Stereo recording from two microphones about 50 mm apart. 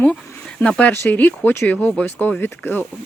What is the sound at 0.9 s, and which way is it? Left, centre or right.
Speech, left.